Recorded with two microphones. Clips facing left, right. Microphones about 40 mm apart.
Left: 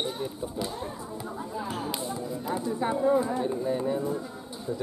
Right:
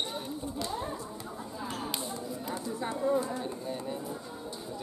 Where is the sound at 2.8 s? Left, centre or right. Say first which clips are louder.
Left 5 dB; left.